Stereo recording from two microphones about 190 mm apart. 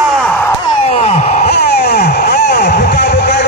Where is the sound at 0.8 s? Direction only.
35° left (ahead or behind).